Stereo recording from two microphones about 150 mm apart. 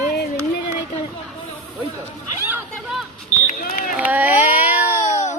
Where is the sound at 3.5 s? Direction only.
65° left (ahead or behind).